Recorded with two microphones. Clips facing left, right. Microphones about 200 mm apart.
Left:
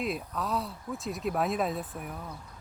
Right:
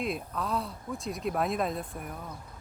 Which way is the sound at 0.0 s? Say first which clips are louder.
Even; centre (ahead or behind).